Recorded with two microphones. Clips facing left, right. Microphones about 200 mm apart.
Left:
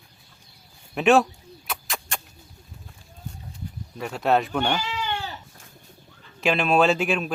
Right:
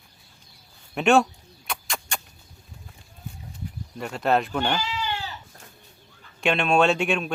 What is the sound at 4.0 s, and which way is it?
Speech, centre (ahead or behind).